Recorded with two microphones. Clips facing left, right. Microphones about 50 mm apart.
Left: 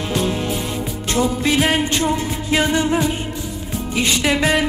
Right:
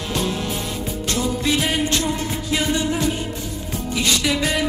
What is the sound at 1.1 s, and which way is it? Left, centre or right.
Music, left.